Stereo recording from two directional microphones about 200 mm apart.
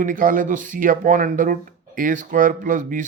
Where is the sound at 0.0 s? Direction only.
40° right (ahead or behind).